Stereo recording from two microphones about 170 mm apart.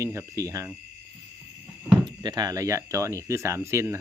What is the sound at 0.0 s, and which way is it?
Speech, 15° right (ahead or behind).